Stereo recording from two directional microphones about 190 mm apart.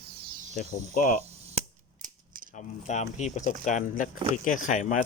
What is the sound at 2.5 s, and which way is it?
Speech, 40° left (ahead or behind).